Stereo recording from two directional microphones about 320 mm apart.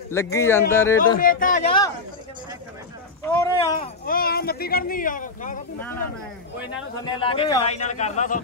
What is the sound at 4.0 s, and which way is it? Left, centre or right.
Speech, left.